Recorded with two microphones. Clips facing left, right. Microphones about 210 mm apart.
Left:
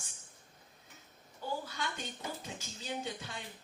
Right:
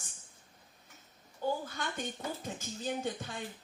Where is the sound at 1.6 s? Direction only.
50° right (ahead or behind).